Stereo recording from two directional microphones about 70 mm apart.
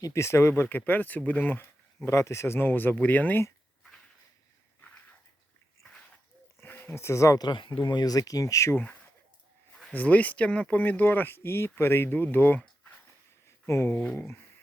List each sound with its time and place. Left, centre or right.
0.0 s speech: left
2.0 s speech: left
6.6 s a sound: left
7.9 s speech: left
9.9 s speech: left